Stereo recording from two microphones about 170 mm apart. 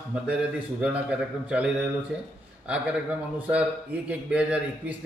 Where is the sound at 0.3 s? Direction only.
5° right (ahead or behind).